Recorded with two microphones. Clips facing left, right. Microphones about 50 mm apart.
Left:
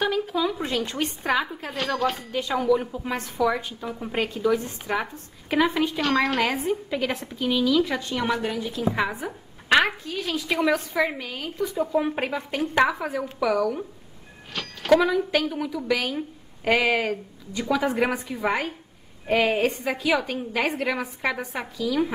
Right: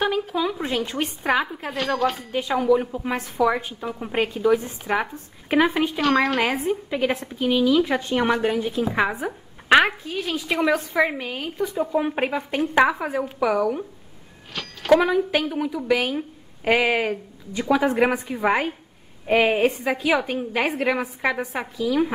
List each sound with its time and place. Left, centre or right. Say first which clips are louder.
0.0 s a sound: right 1 dB; centre
1.0 s a woman's voice: right 2 dB; centre
1.7 s speech: right 3 dB; centre
2.3 s a woman's voice: right 3 dB; centre
5.9 s a woman's voice: right 4 dB; centre
14.5 s speech: right 2 dB; centre
15.3 s a woman's voice: right 1 dB; centre